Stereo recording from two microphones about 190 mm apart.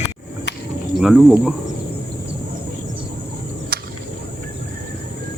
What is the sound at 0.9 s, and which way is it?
Speech, centre (ahead or behind).